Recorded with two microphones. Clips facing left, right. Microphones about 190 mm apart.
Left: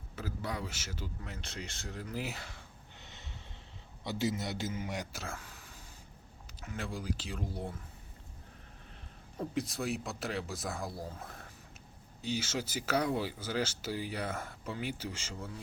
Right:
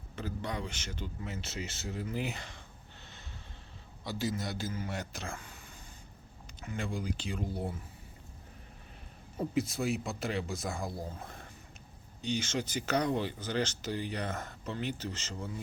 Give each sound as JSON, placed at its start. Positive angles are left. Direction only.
{"t": 0.2, "sound": "speech", "side_deg": 5}
{"t": 4.0, "sound": "a man's voice", "side_deg": 20}
{"t": 5.1, "sound": "speech", "side_deg": 5}
{"t": 9.4, "sound": "speech", "side_deg": 0}